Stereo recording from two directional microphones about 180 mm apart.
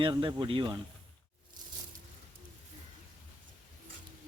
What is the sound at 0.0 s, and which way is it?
Speech, 25° right (ahead or behind).